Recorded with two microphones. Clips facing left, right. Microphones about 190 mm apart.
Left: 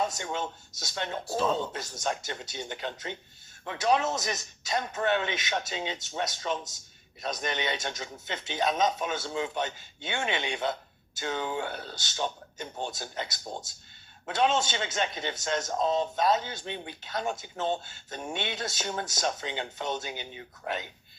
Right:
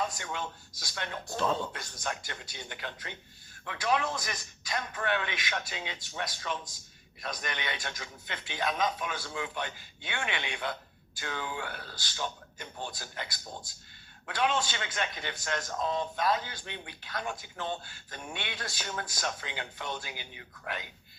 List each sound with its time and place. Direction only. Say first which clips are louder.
0.0 s a man's voice: left 4 dB; 25° left (ahead or behind)